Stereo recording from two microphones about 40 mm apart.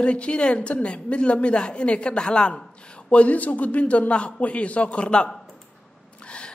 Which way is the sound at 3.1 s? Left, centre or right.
Left.